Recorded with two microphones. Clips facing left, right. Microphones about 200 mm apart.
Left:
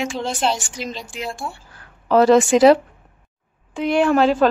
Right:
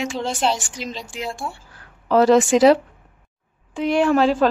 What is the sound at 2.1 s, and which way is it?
Speech, 55° left (ahead or behind).